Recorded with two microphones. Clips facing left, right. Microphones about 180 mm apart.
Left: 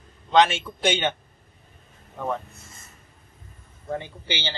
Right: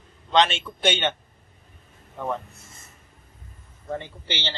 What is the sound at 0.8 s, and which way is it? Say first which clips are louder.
Speech: even; 15° left (ahead or behind).